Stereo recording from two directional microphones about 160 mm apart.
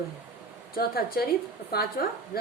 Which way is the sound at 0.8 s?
70° left (ahead or behind).